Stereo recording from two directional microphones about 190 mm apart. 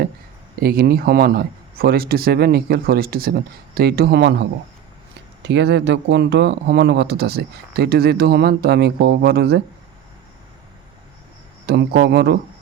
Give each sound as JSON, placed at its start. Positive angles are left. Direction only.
{"t": 0.6, "sound": "speech", "side_deg": -50}
{"t": 11.6, "sound": "speech", "side_deg": -55}